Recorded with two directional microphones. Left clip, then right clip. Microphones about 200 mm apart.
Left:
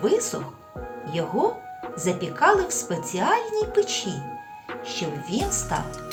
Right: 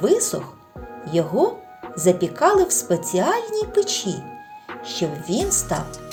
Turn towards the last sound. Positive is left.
turn(degrees=-45)  # may be behind; listen again after turning